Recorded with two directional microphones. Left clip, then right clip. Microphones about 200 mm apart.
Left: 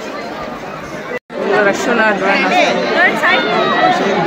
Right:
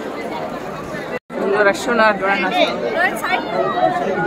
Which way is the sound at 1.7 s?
Centre (ahead or behind).